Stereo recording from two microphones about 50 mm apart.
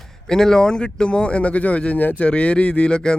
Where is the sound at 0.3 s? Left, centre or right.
Centre.